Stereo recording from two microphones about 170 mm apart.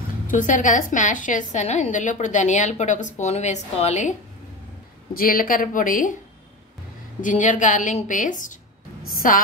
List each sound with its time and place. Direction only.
0.3 s a woman's voice: 50° left (ahead or behind)
5.1 s speech: 55° left (ahead or behind)
7.2 s a woman's voice: 50° left (ahead or behind)